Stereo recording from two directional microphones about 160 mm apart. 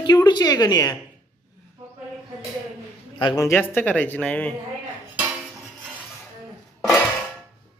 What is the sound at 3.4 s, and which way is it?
Speech, 15° left (ahead or behind).